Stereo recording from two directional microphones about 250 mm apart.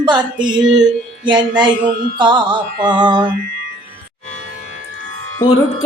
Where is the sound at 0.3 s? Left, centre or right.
Centre.